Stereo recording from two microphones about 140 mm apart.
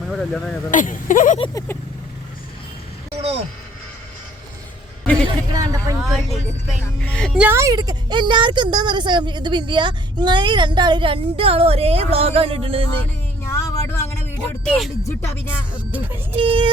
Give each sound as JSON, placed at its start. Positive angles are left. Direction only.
{"t": 0.1, "sound": "speech", "side_deg": 0}
{"t": 0.7, "sound": "speech", "side_deg": 65}
{"t": 1.5, "sound": "speech", "side_deg": 15}
{"t": 3.2, "sound": "a sound", "side_deg": -50}
{"t": 5.5, "sound": "a sound", "side_deg": -25}
{"t": 6.1, "sound": "vehicle", "side_deg": 0}
{"t": 6.8, "sound": "speech", "side_deg": 10}
{"t": 7.3, "sound": "a woman's voice", "side_deg": -15}
{"t": 13.4, "sound": "a sound", "side_deg": 20}
{"t": 14.6, "sound": "speech", "side_deg": 0}
{"t": 15.0, "sound": "speech", "side_deg": 20}
{"t": 15.7, "sound": "speech", "side_deg": -10}
{"t": 16.3, "sound": "a woman's voice", "side_deg": -40}